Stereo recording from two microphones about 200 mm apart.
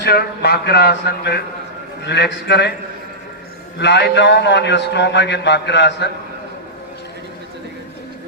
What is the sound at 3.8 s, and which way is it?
A man's voice, 60° left (ahead or behind).